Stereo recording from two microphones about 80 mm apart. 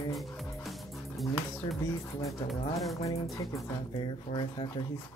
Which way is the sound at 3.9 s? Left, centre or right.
Left.